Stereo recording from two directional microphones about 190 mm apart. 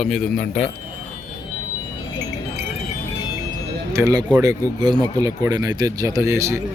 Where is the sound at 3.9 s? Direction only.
15° right (ahead or behind).